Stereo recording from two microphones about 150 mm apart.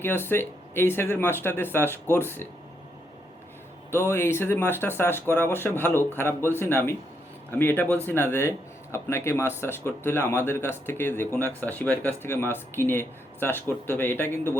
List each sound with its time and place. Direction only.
0.0 s speech: 15° left (ahead or behind)
3.9 s speech: 15° left (ahead or behind)
7.5 s speech: 15° left (ahead or behind)